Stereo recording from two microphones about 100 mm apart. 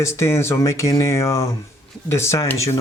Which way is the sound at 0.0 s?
30° left (ahead or behind).